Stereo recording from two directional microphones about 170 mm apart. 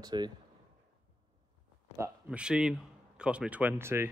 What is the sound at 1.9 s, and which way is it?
Speech, 15° right (ahead or behind).